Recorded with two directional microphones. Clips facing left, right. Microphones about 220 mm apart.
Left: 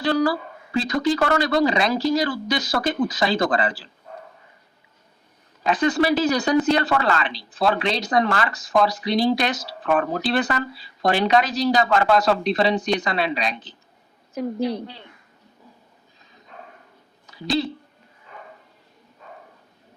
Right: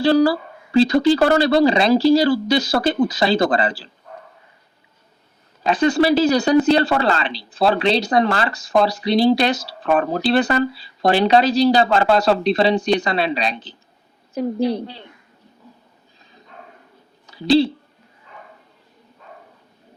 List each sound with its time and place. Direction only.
0.0 s speech: 30° right (ahead or behind)
5.6 s speech: 30° right (ahead or behind)
17.3 s a woman's voice: 30° right (ahead or behind)